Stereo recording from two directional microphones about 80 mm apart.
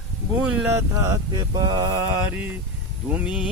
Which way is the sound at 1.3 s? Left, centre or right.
Right.